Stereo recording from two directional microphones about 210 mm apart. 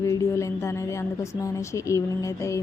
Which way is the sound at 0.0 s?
15° left (ahead or behind).